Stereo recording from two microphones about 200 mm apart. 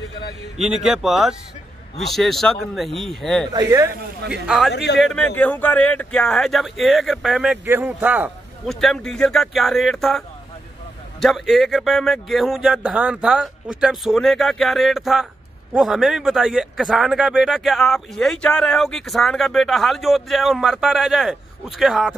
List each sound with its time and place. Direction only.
0.6 s speech: centre (ahead or behind)
3.5 s speech: 15° right (ahead or behind)
4.3 s speech: centre (ahead or behind)
4.7 s a man's voice: 55° left (ahead or behind)
5.0 s speech: 5° left (ahead or behind)